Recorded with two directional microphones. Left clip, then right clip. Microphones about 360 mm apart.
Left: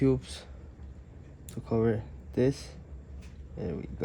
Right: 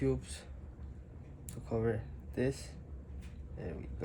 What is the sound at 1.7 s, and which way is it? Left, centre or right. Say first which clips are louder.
Speech: left 7 dB; left.